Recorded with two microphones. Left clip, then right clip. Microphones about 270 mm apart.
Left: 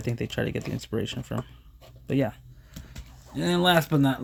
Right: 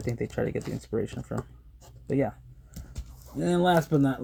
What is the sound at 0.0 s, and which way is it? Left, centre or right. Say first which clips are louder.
Speech: even; left.